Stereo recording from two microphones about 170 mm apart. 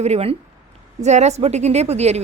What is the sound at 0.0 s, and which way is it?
Speech, 35° right (ahead or behind).